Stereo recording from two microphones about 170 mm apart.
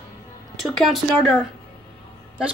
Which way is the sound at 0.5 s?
Centre (ahead or behind).